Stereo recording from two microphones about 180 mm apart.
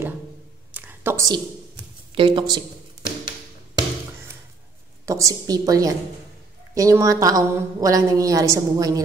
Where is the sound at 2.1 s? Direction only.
25° right (ahead or behind).